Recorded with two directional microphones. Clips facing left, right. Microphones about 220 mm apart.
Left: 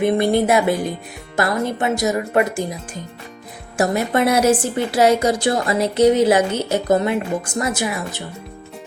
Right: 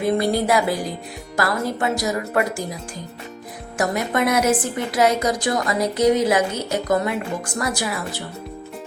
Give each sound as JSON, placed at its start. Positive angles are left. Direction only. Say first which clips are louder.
{"t": 0.0, "sound": "a woman's voice", "louder": "left 3 dB", "side_deg": 25}